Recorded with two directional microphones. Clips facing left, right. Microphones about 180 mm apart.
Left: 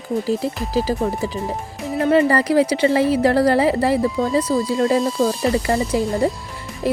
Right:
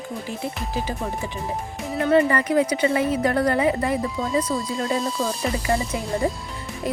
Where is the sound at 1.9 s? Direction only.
30° left (ahead or behind).